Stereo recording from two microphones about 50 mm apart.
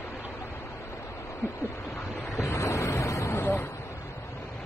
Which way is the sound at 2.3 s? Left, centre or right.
Left.